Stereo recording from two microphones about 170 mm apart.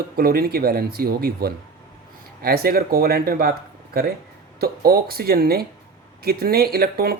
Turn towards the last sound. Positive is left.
turn(degrees=-60)  # may be behind; listen again after turning